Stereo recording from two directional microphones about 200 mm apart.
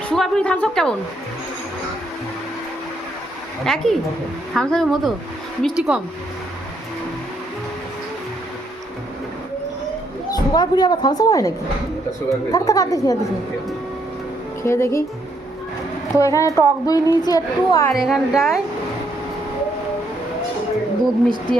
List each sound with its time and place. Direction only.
0.1 s a woman's voice: 5° left (ahead or behind)
3.6 s a woman's voice: centre (ahead or behind)
10.3 s a woman's voice: 20° left (ahead or behind)
14.6 s speech: 15° left (ahead or behind)
16.1 s a woman's voice: 15° left (ahead or behind)
17.9 s a woman's voice: centre (ahead or behind)